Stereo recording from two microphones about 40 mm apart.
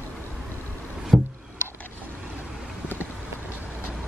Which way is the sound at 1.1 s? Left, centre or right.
Centre.